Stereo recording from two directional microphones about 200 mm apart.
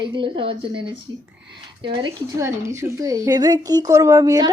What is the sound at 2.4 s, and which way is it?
A woman's voice, 15° right (ahead or behind).